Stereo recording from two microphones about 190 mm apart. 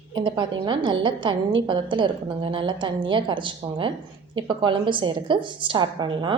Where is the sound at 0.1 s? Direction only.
25° right (ahead or behind).